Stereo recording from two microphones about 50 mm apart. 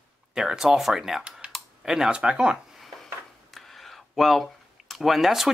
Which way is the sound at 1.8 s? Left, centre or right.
Centre.